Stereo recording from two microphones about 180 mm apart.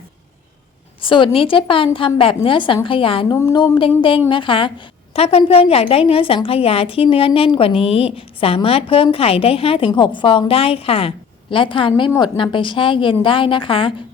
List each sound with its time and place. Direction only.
1.0 s a woman's voice: 30° left (ahead or behind)